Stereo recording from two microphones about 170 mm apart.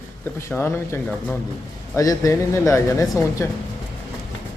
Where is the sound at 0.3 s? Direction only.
15° left (ahead or behind).